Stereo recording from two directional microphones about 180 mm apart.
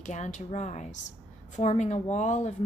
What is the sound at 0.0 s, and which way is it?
A woman's voice, 40° left (ahead or behind).